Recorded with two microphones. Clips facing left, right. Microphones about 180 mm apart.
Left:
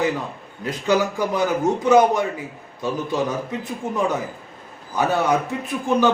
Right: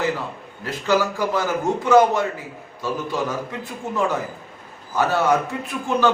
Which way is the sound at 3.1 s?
20° left (ahead or behind).